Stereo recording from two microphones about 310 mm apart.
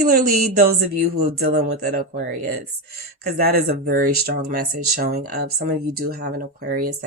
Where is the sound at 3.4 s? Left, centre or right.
Right.